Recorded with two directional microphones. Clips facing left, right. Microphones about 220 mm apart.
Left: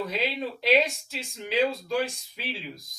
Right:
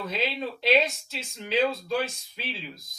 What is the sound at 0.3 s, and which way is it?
Speech, 10° left (ahead or behind).